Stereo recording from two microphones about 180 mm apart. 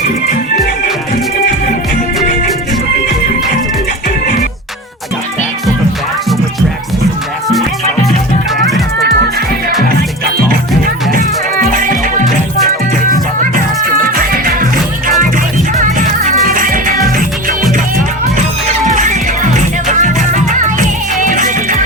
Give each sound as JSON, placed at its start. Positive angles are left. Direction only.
{"t": 14.0, "sound": "music", "side_deg": -50}
{"t": 18.9, "sound": "music", "side_deg": -45}